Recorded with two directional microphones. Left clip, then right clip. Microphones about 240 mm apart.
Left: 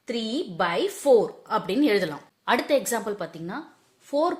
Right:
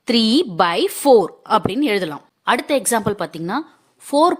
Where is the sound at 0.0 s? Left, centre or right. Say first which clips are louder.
Right 12 dB; right.